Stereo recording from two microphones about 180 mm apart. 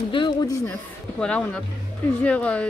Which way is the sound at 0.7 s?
5° left (ahead or behind).